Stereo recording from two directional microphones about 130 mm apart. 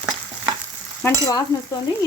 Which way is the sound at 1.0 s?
20° left (ahead or behind).